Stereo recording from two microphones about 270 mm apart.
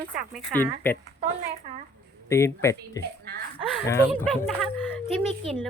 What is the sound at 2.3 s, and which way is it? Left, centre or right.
A woman's voice, centre.